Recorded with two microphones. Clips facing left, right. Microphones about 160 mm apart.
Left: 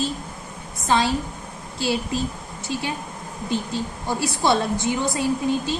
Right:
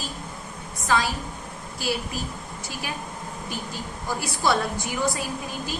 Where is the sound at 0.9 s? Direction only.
25° left (ahead or behind).